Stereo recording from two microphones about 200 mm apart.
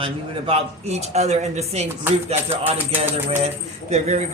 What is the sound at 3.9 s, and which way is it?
Speech, 35° right (ahead or behind).